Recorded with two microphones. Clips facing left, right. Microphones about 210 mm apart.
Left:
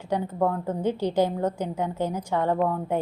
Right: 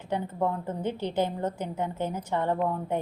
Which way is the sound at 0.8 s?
10° left (ahead or behind).